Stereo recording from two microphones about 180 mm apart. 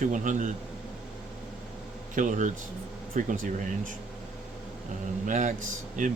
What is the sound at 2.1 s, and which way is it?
Speech, 45° right (ahead or behind).